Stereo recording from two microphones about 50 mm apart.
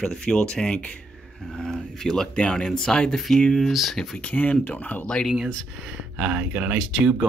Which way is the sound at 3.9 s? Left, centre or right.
Centre.